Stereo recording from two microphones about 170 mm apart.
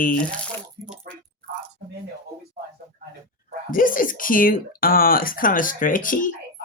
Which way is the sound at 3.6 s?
55° left (ahead or behind).